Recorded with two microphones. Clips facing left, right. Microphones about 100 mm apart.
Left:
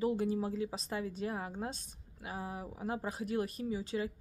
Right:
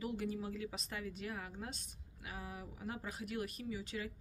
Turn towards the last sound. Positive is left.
turn(degrees=30)  # may be behind; listen again after turning